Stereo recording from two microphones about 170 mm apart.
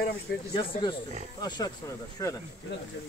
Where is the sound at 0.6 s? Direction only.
30° left (ahead or behind).